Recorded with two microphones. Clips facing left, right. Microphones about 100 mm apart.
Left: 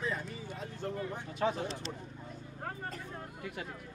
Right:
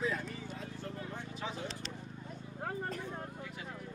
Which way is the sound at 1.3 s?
55° left (ahead or behind).